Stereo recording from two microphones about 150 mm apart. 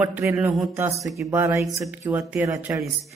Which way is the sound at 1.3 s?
20° right (ahead or behind).